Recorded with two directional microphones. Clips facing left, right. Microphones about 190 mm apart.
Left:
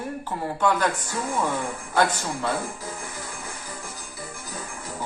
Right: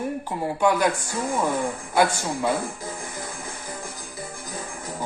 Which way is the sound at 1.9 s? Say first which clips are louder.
Right 1 dB; 10° right (ahead or behind).